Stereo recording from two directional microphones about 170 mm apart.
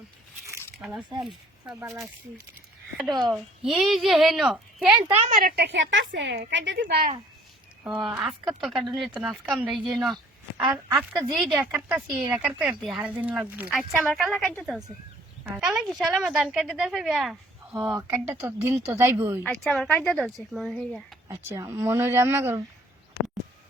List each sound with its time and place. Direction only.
0.8 s speech: centre (ahead or behind)
1.8 s speech: 15° right (ahead or behind)
3.3 s a woman's voice: 5° right (ahead or behind)
5.3 s a woman's voice: 55° right (ahead or behind)
7.9 s a woman's voice: 10° right (ahead or behind)
17.9 s speech: 15° right (ahead or behind)
19.5 s a woman's voice: centre (ahead or behind)
21.2 s speech: 20° right (ahead or behind)